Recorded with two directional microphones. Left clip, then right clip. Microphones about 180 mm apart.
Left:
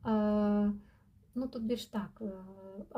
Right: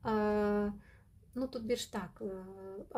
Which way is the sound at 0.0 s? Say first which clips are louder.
Even; 25° right (ahead or behind).